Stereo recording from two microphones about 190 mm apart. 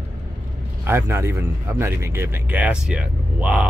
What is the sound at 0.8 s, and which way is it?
Speech, 10° right (ahead or behind).